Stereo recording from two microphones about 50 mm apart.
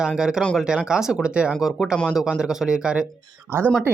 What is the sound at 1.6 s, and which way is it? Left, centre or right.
Speech, centre.